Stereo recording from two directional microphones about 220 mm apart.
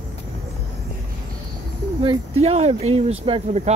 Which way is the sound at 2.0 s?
25° right (ahead or behind).